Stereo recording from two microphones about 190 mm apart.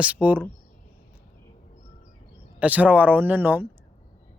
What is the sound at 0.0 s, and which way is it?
Speech, 10° right (ahead or behind).